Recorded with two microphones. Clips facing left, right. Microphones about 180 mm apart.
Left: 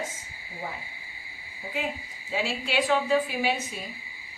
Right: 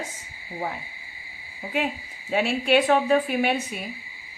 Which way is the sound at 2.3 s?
60° right (ahead or behind).